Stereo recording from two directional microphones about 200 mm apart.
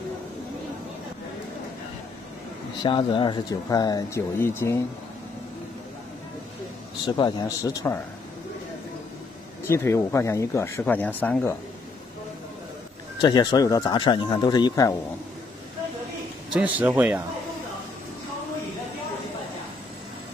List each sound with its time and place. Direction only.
2.8 s speech: 25° left (ahead or behind)
7.1 s speech: 20° left (ahead or behind)
9.7 s speech: 15° left (ahead or behind)
13.2 s speech: 20° left (ahead or behind)
16.5 s speech: 5° right (ahead or behind)